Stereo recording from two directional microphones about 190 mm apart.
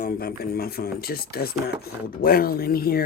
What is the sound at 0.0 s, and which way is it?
Speech, 50° left (ahead or behind).